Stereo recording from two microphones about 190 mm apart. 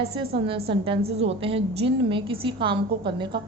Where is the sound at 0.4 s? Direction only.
30° right (ahead or behind).